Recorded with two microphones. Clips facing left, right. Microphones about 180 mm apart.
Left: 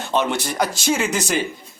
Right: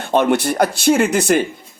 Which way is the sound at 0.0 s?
55° right (ahead or behind).